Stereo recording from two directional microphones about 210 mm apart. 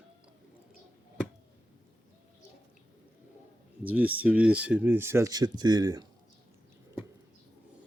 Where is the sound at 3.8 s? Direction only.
10° right (ahead or behind).